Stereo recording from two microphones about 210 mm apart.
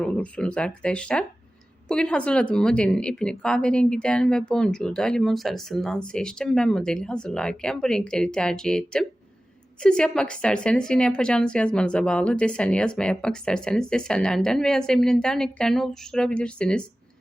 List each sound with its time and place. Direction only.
0.0 s a woman's voice: 5° left (ahead or behind)